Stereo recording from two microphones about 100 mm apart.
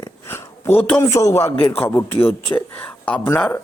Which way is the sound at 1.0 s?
35° left (ahead or behind).